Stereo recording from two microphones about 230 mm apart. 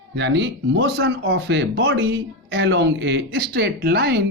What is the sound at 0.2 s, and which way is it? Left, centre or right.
Speech, right.